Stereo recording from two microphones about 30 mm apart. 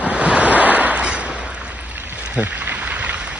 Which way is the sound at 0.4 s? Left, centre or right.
Right.